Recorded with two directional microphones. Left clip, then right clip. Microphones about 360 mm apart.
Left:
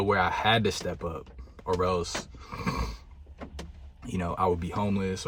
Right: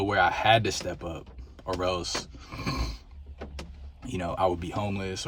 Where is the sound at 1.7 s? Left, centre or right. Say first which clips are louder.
Left 1 dB; centre.